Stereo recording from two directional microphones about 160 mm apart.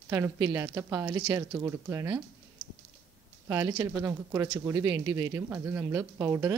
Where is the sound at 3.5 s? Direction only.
20° right (ahead or behind).